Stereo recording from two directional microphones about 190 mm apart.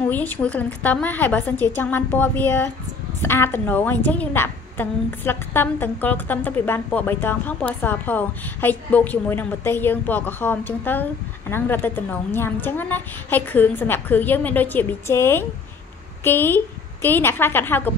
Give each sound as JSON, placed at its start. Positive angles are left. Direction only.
{"t": 0.1, "sound": "a woman's voice", "side_deg": 10}